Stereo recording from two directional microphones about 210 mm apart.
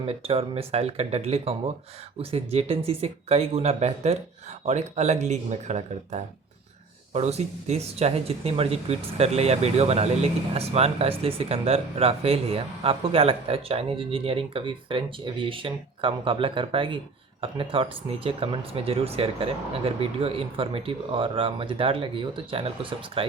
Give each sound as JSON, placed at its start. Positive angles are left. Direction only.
{"t": 0.0, "sound": "speech", "side_deg": -30}